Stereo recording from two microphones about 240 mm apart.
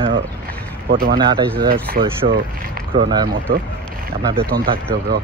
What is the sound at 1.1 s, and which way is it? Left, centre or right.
Speech, centre.